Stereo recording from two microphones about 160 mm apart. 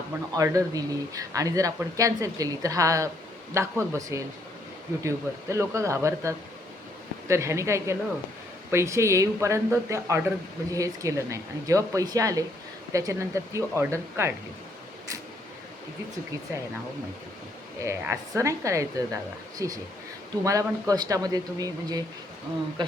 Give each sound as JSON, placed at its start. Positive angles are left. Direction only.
{"t": 0.3, "sound": "speech", "side_deg": -20}
{"t": 17.8, "sound": "speech", "side_deg": -15}